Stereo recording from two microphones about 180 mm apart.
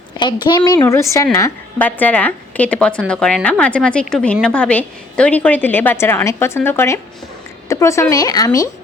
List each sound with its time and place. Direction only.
0.2 s a woman's voice: 25° left (ahead or behind)